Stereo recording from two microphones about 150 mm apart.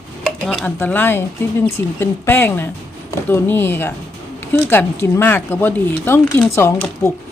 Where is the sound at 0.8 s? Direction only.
15° left (ahead or behind).